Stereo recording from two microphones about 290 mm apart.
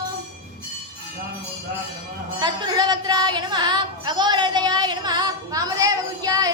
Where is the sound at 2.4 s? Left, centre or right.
Centre.